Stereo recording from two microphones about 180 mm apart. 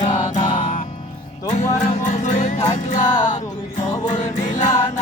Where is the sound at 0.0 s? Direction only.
45° left (ahead or behind).